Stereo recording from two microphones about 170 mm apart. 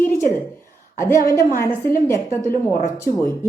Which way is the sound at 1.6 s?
15° left (ahead or behind).